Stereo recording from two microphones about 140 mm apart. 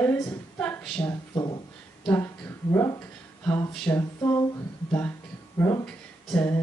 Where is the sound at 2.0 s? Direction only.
15° left (ahead or behind).